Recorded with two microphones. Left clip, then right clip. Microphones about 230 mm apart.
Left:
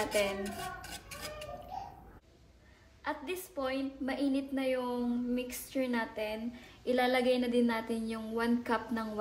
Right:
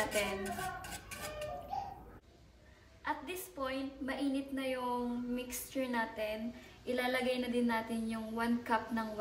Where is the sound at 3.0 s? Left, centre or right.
Left.